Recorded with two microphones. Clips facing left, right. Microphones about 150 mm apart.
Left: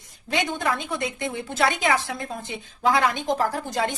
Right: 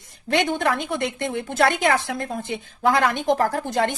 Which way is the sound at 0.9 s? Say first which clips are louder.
Right 3 dB; 60° right (ahead or behind).